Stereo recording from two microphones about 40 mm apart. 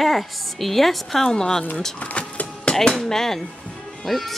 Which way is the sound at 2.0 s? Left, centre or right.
Left.